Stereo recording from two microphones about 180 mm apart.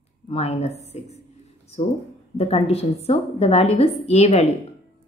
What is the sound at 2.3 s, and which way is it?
Speech, 35° left (ahead or behind).